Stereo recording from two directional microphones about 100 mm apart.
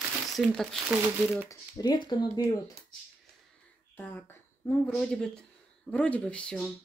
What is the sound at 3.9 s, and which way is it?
Speech, 15° left (ahead or behind).